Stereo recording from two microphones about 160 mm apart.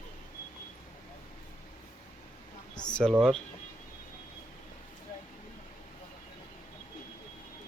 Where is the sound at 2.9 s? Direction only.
5° left (ahead or behind).